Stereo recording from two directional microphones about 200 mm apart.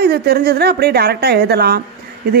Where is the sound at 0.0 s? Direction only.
50° right (ahead or behind).